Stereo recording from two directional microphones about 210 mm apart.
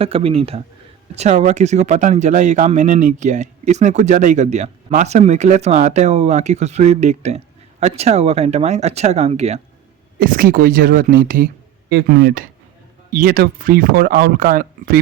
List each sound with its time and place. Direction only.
0.0 s speech: 25° right (ahead or behind)
10.2 s speech: 40° right (ahead or behind)